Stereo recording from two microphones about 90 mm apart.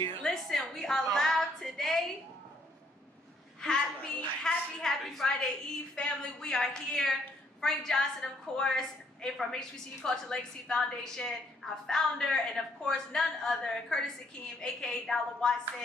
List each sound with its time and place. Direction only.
0.2 s a woman's voice: 5° left (ahead or behind)
1.1 s a sound: 5° left (ahead or behind)
3.6 s a woman's voice: 10° left (ahead or behind)